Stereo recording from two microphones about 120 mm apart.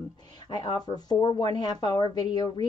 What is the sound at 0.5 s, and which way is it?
A woman's voice, 35° left (ahead or behind).